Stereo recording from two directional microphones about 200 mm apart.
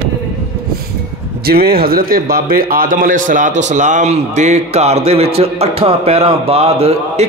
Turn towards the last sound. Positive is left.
turn(degrees=-30)  # may be behind; listen again after turning